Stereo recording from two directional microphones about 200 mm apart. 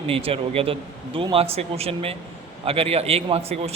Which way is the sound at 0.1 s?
30° right (ahead or behind).